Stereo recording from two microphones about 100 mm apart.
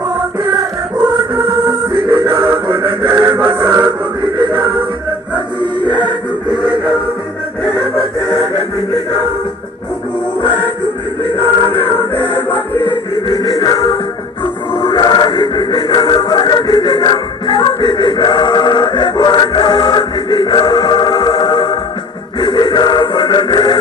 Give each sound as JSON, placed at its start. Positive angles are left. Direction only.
{"t": 0.6, "sound": "music", "side_deg": -50}
{"t": 12.1, "sound": "music", "side_deg": 20}
{"t": 13.1, "sound": "music", "side_deg": 55}